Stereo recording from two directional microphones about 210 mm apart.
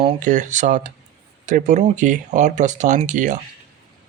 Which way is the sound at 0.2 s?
35° right (ahead or behind).